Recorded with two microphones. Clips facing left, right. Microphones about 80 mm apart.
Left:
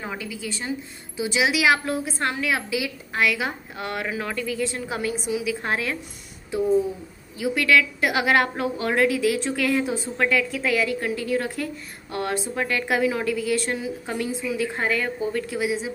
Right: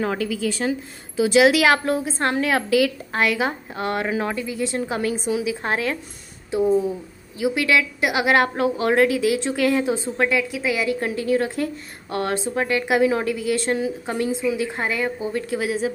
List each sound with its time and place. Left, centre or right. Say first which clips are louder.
0.0 s speech: right 9 dB; right
1.2 s a woman's voice: right 6 dB; right
2.0 s a woman's voice: right 3 dB; right
2.3 s a woman's voice: right 6 dB; right
3.2 s a woman's voice: right 2 dB; right
4.4 s a woman's voice: right 1 dB; centre
4.7 s a woman's voice: right 4 dB; right
7.4 s a woman's voice: even; right
10.9 s a woman's voice: right 4 dB; right
12.6 s a woman's voice: right 4 dB; centre
13.0 s a woman's voice: right 3 dB; right; by 15.4 s centre
15.5 s a woman's voice: right 3 dB; right